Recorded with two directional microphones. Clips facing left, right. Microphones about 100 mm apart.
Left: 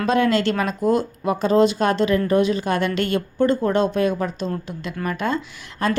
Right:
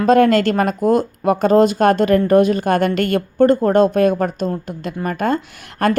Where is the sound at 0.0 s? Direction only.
50° right (ahead or behind).